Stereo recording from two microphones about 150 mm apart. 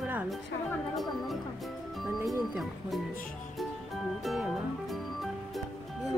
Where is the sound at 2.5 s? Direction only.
Centre (ahead or behind).